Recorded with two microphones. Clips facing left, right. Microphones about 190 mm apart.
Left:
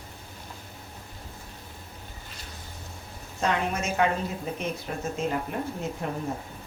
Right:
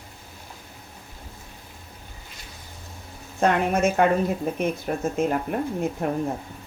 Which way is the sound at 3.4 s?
55° right (ahead or behind).